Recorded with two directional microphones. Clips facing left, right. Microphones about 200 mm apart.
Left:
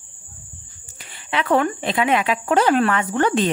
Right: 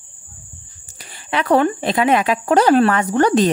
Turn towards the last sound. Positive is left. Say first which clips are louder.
# right 4 dB
turn(degrees=-40)  # may be behind; listen again after turning